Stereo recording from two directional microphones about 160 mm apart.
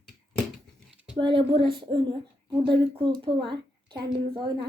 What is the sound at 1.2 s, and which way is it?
A woman's voice, 30° right (ahead or behind).